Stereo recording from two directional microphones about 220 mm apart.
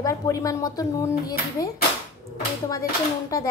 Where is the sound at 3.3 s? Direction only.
15° left (ahead or behind).